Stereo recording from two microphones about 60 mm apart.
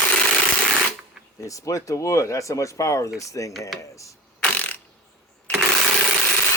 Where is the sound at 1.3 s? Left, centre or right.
Left.